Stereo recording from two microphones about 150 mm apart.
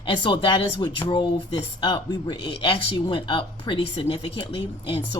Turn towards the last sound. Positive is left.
turn(degrees=30)  # may be behind; listen again after turning